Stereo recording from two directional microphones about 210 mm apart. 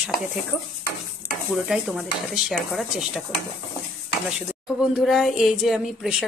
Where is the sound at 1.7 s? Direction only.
Centre (ahead or behind).